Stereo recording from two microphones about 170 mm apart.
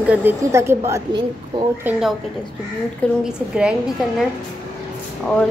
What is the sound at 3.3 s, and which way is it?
Speech, 5° right (ahead or behind).